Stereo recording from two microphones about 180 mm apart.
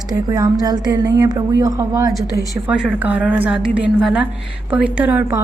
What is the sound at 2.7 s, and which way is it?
A woman's voice, 5° right (ahead or behind).